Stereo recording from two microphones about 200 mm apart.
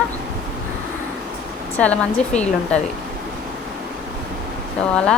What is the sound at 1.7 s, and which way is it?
Speech, 5° left (ahead or behind).